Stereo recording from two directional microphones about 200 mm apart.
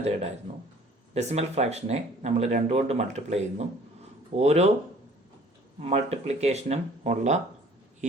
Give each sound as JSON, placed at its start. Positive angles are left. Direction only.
{"t": 0.0, "sound": "speech", "side_deg": -30}
{"t": 5.8, "sound": "speech", "side_deg": -30}